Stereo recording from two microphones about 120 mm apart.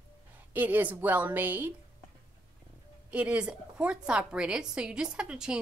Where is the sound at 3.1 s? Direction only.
10° right (ahead or behind).